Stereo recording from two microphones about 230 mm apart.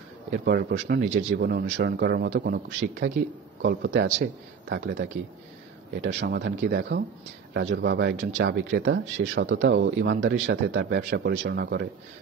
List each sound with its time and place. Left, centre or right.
0.3 s a man's voice: right